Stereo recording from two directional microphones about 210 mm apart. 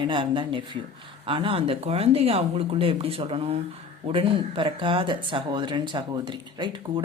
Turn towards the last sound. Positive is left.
turn(degrees=-20)  # may be behind; listen again after turning